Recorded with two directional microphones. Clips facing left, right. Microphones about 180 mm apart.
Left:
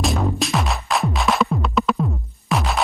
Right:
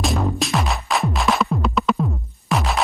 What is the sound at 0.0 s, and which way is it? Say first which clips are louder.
Music: even; centre (ahead or behind).